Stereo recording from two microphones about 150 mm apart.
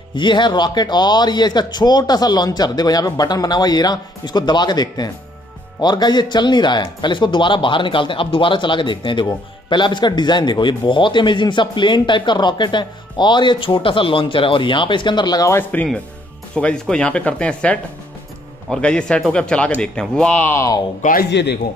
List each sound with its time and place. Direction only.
0.1 s speech: 30° left (ahead or behind)
21.0 s a man's voice: 70° left (ahead or behind)